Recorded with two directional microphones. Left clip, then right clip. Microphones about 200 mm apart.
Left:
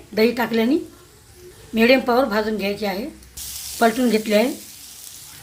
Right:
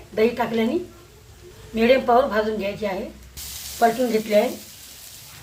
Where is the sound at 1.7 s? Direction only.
45° left (ahead or behind).